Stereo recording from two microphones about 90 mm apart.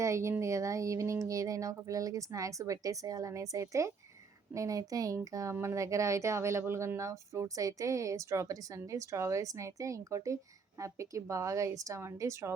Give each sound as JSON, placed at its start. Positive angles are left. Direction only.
{"t": 0.0, "sound": "speech", "side_deg": -35}